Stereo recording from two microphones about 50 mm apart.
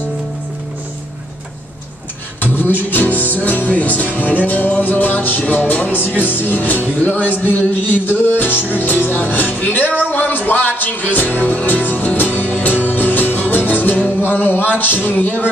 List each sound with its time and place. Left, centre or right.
2.4 s music: left
6.0 s music: left